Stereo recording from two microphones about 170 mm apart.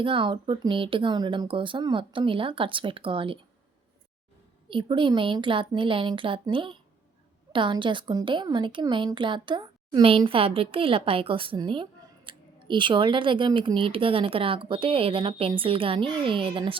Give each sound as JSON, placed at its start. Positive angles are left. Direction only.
{"t": 0.0, "sound": "speech", "side_deg": -30}
{"t": 4.7, "sound": "a woman's voice", "side_deg": -30}